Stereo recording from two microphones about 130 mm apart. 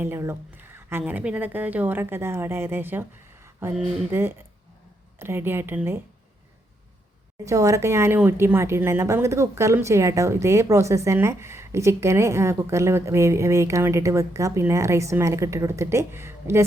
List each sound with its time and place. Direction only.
0.0 s a woman's voice: 20° right (ahead or behind)
7.4 s speech: 25° right (ahead or behind)